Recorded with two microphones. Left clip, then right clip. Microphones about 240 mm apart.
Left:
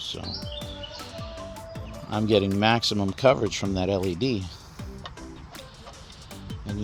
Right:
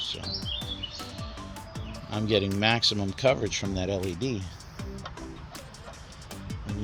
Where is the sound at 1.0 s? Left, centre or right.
Left.